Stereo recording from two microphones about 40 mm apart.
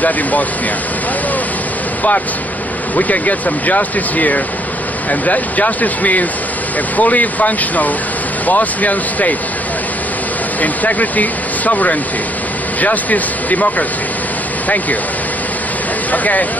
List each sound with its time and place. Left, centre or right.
0.0 s speech: left
3.0 s speech: left
10.6 s speech: left
16.1 s speech: left